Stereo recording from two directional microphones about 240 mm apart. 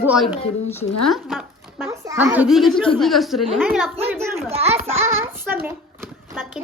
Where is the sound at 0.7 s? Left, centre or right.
Centre.